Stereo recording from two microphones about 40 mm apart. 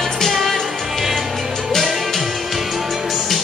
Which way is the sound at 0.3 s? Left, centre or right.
Centre.